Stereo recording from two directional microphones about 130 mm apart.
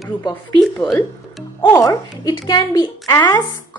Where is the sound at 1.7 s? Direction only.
30° left (ahead or behind).